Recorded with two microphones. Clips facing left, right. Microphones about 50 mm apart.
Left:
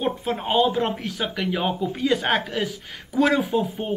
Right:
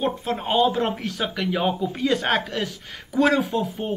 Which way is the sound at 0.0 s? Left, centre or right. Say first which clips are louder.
Even; centre.